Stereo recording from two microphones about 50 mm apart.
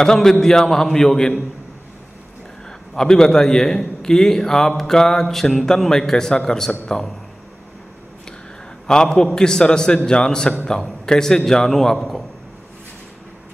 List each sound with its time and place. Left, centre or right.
0.0 s a man's voice: centre
2.9 s a man's voice: centre
8.8 s a man's voice: centre